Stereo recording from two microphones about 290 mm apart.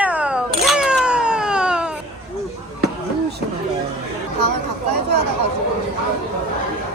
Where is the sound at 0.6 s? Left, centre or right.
Centre.